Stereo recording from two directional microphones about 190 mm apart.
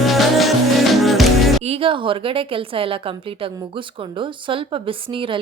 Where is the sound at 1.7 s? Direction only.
30° right (ahead or behind).